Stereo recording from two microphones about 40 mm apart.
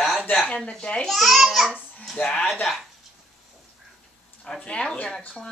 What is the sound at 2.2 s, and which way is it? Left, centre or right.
Speech, left.